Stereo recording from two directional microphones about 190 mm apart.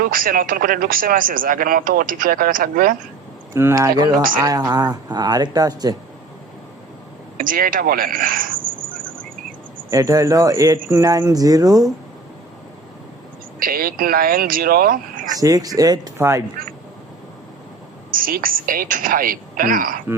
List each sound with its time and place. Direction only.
0.0 s a man's voice: 50° right (ahead or behind)
3.5 s speech: 15° right (ahead or behind)
7.3 s a man's voice: 50° right (ahead or behind)
9.9 s speech: 15° right (ahead or behind)
13.6 s a man's voice: 50° right (ahead or behind)
15.4 s speech: 20° right (ahead or behind)
18.1 s a man's voice: 50° right (ahead or behind)